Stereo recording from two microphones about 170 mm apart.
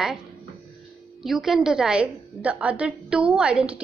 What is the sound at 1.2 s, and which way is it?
A woman's voice, centre (ahead or behind).